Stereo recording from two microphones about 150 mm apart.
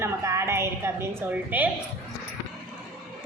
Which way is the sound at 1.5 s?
10° right (ahead or behind).